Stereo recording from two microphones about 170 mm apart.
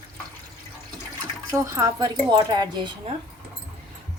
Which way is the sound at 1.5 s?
20° right (ahead or behind).